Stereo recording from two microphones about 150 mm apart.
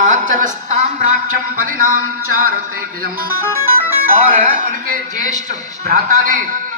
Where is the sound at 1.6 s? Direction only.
70° right (ahead or behind).